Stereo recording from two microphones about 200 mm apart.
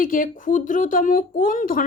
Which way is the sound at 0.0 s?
45° left (ahead or behind).